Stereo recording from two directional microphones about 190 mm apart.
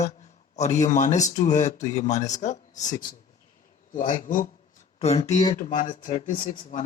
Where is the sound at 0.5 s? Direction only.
35° left (ahead or behind).